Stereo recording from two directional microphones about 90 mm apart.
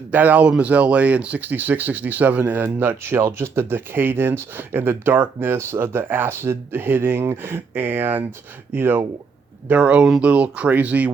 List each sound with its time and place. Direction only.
0.1 s speech: 20° right (ahead or behind)